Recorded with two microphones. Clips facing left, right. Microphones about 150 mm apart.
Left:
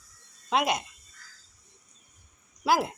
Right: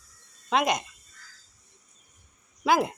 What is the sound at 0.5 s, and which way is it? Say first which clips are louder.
Speech: right 1 dB; 5° left (ahead or behind).